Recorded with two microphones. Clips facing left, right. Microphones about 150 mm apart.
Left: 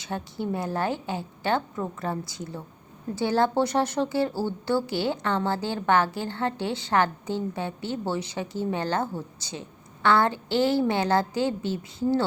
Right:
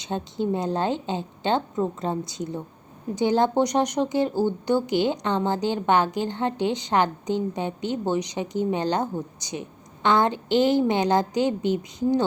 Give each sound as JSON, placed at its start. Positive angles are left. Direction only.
{"t": 0.0, "sound": "a woman's voice", "side_deg": -20}